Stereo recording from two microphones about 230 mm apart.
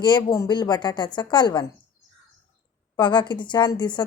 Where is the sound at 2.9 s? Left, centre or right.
Centre.